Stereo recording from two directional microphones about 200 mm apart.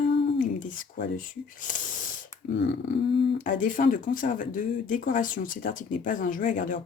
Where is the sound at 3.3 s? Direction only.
40° left (ahead or behind).